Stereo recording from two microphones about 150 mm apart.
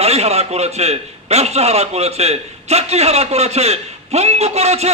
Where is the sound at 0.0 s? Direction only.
45° right (ahead or behind).